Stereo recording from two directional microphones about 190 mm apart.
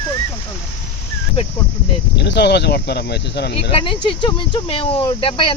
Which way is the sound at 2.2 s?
60° left (ahead or behind).